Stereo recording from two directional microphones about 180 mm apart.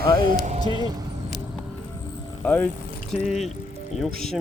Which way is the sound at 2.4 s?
10° left (ahead or behind).